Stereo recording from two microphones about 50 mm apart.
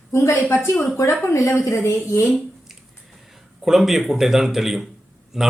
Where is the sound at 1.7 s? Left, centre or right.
Left.